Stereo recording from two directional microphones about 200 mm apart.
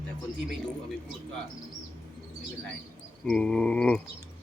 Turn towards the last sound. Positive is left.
turn(degrees=5)  # may be behind; listen again after turning